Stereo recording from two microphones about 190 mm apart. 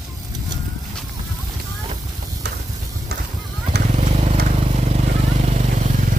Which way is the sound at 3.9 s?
40° right (ahead or behind).